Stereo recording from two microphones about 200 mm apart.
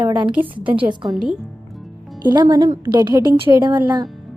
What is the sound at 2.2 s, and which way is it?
Speech, 20° right (ahead or behind).